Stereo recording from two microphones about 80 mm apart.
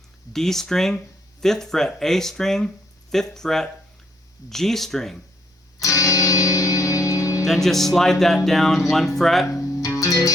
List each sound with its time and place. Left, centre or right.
0.3 s speech: centre
5.8 s music: left
7.4 s speech: centre
9.5 s music: left